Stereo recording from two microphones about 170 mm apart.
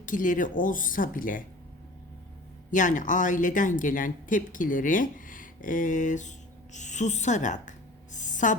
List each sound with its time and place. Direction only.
0.0 s speech: 50° left (ahead or behind)
2.6 s speech: 50° left (ahead or behind)
8.1 s a sound: 45° left (ahead or behind)